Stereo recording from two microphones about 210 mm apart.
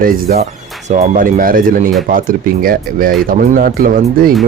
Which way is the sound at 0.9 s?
40° right (ahead or behind).